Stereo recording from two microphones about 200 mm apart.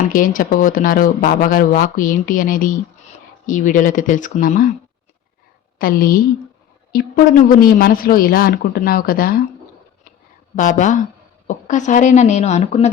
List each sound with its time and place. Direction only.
0.1 s speech: 40° left (ahead or behind)
5.8 s speech: 45° left (ahead or behind)
7.4 s speech: 45° left (ahead or behind)
10.5 s speech: 40° left (ahead or behind)